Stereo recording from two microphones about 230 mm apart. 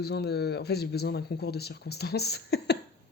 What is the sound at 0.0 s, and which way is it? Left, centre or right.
Speech, left.